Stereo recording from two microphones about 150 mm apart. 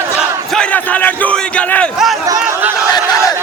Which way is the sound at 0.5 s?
10° left (ahead or behind).